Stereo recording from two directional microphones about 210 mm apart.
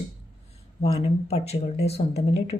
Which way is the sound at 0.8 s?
30° left (ahead or behind).